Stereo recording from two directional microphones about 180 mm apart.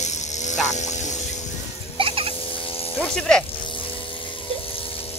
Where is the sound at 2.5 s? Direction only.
30° left (ahead or behind).